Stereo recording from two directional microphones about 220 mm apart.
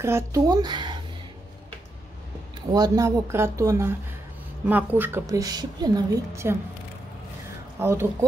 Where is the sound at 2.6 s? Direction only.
20° right (ahead or behind).